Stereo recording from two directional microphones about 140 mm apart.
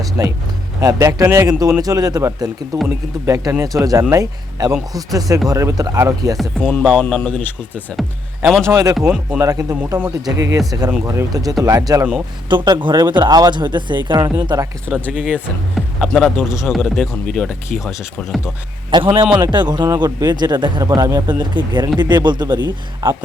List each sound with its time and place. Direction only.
0.8 s speech: 25° right (ahead or behind)
6.6 s speech: 10° left (ahead or behind)
7.9 s speech: centre (ahead or behind)
8.7 s speech: 25° right (ahead or behind)
9.0 s speech: 5° right (ahead or behind)
9.4 s speech: 25° right (ahead or behind)
15.1 s speech: 5° right (ahead or behind)
18.9 s speech: 35° right (ahead or behind)